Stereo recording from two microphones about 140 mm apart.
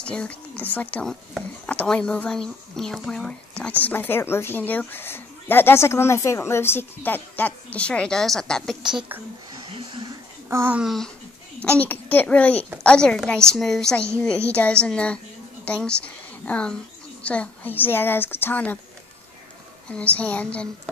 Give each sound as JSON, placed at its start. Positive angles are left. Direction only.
{"t": 0.0, "sound": "speech", "side_deg": 5}
{"t": 9.8, "sound": "a sound", "side_deg": -35}
{"t": 10.5, "sound": "speech", "side_deg": -15}
{"t": 10.8, "sound": "a woman's voice", "side_deg": 0}
{"t": 11.8, "sound": "a woman's voice", "side_deg": 15}
{"t": 19.9, "sound": "speech", "side_deg": 10}